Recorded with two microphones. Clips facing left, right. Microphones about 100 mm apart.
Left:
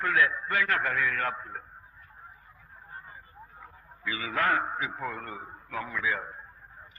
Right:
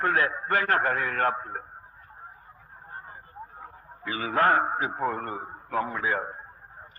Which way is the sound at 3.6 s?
40° right (ahead or behind).